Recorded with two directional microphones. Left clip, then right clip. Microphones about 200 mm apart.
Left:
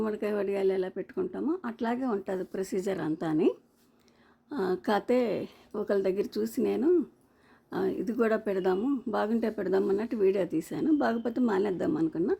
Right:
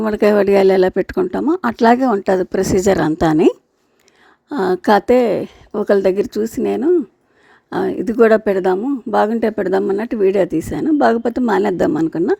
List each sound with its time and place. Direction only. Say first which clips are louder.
0.0 s speech: right 17 dB; 45° right (ahead or behind)